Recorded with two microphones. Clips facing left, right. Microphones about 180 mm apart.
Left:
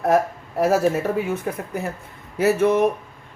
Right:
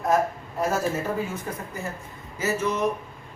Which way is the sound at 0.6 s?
70° left (ahead or behind).